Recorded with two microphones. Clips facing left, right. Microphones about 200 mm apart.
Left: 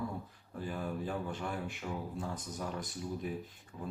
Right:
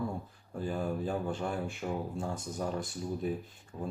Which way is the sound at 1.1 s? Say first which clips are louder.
Right 4 dB; 30° right (ahead or behind).